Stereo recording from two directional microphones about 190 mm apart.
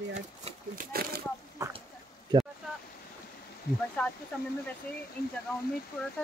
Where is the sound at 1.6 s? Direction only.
15° right (ahead or behind).